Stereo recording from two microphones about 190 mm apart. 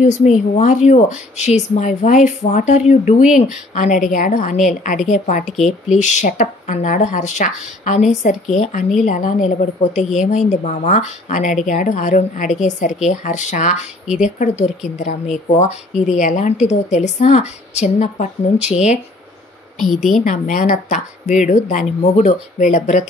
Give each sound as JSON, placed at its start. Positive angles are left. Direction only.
{"t": 0.0, "sound": "a woman's voice", "side_deg": 40}
{"t": 19.8, "sound": "a woman's voice", "side_deg": 0}
{"t": 20.2, "sound": "speech", "side_deg": 45}